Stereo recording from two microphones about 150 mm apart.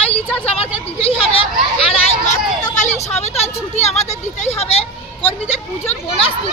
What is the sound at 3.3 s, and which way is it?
Vehicle, 45° left (ahead or behind).